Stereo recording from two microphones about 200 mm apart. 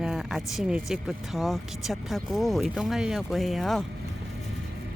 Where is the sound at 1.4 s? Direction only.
Centre (ahead or behind).